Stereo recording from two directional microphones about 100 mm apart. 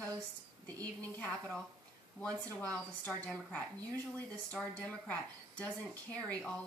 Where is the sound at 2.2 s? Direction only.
35° right (ahead or behind).